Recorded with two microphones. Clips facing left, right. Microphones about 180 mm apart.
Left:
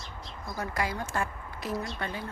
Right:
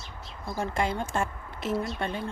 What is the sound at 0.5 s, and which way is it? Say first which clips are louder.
A woman's voice: right 4 dB; 25° right (ahead or behind).